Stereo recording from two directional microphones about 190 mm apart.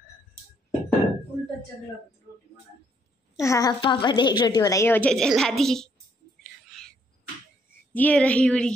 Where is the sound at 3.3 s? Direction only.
15° left (ahead or behind).